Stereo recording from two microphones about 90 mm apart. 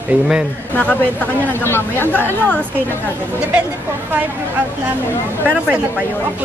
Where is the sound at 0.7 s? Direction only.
15° left (ahead or behind).